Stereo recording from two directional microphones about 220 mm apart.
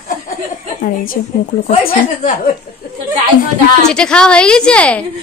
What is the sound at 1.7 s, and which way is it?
Speech, 30° left (ahead or behind).